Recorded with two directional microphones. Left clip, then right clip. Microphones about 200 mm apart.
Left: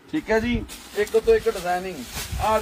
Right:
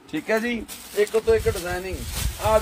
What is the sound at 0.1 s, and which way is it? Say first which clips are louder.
Speech: left 1 dB; 60° right (ahead or behind).